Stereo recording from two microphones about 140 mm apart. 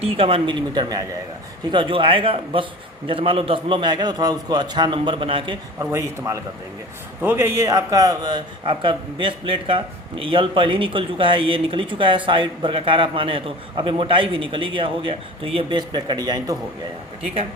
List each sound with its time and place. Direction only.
0.0 s a man's voice: 40° right (ahead or behind)
1.7 s a man's voice: 40° right (ahead or behind)
5.8 s a man's voice: 20° right (ahead or behind)